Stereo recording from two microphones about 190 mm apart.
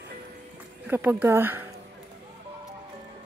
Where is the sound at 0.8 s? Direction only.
10° right (ahead or behind).